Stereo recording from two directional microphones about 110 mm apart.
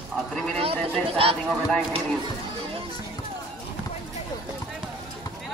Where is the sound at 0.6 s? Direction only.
60° right (ahead or behind).